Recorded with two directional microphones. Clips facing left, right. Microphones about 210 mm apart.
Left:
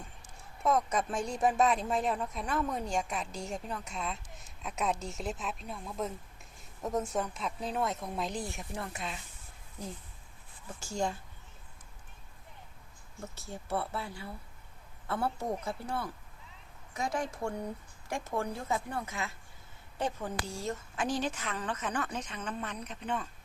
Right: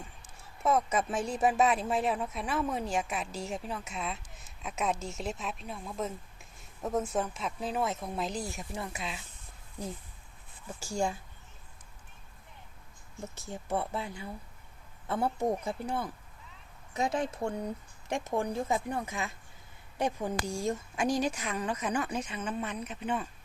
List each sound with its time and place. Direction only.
0.6 s a woman's voice: 5° right (ahead or behind)
10.8 s a woman's voice: 10° right (ahead or behind)
13.3 s a woman's voice: 20° right (ahead or behind)